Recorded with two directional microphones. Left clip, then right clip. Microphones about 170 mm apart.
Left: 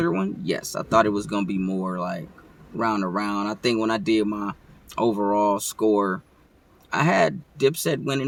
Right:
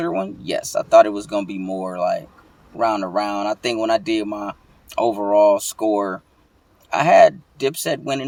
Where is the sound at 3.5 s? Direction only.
15° left (ahead or behind).